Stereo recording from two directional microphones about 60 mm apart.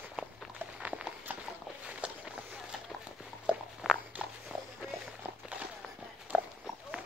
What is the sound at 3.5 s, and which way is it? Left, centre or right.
Walk, centre.